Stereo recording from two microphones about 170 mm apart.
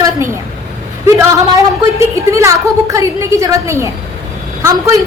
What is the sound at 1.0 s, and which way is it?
A woman's voice, 15° right (ahead or behind).